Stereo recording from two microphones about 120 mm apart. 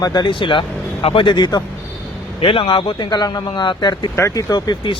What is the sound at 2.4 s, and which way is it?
A man's voice, 50° left (ahead or behind).